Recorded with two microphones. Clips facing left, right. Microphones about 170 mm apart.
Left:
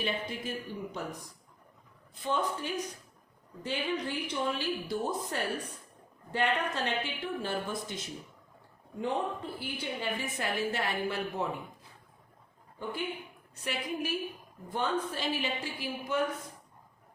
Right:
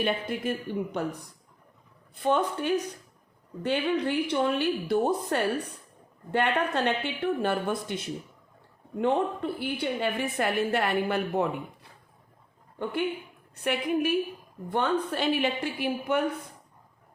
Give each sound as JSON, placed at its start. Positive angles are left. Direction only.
{"t": 0.0, "sound": "a woman's voice", "side_deg": -60}
{"t": 2.1, "sound": "a woman's voice", "side_deg": -60}